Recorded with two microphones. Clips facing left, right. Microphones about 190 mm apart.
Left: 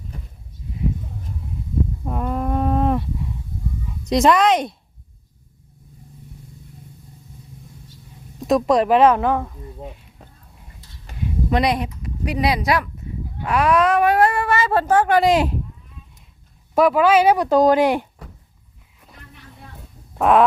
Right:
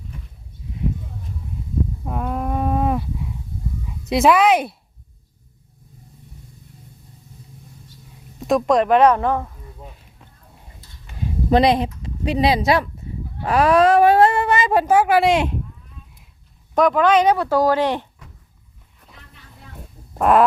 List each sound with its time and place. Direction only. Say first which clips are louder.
2.0 s livestock: left 2 dB; centre (ahead or behind)
4.0 s a woman's voice: even; 5° right (ahead or behind)
8.4 s a woman's voice: even; centre (ahead or behind)
11.2 s speech: right 4 dB; 30° right (ahead or behind); by 15.5 s centre (ahead or behind)
16.7 s speech: left 1 dB; 5° left (ahead or behind)
20.1 s fart: even; centre (ahead or behind)